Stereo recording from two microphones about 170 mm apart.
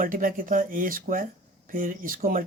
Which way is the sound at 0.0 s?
50° right (ahead or behind).